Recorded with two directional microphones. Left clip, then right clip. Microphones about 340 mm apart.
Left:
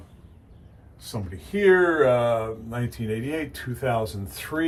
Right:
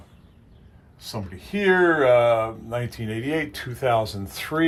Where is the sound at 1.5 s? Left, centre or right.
Centre.